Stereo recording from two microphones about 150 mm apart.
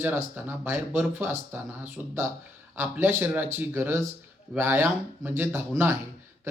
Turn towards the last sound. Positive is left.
turn(degrees=-15)  # may be behind; listen again after turning